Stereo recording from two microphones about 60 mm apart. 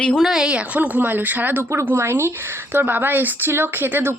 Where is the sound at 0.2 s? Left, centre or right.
Centre.